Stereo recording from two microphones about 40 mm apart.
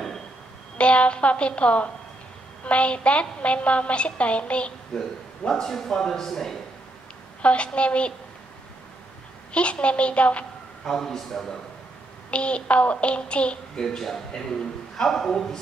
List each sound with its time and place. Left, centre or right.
0.7 s a woman's voice: left
5.5 s a man's voice: centre
7.4 s child singing: left
9.5 s child singing: left
10.9 s a man's voice: centre
12.3 s child singing: left
13.7 s a man's voice: centre